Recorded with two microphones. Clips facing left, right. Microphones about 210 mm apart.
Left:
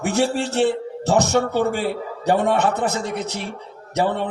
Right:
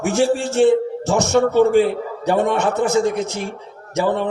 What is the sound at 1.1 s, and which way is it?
Speech, 35° left (ahead or behind).